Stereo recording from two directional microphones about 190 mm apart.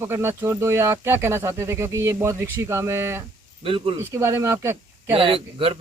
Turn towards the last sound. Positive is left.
turn(degrees=-30)  # may be behind; listen again after turning